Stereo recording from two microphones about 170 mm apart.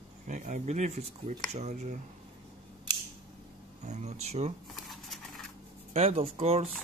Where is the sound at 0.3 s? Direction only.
45° right (ahead or behind).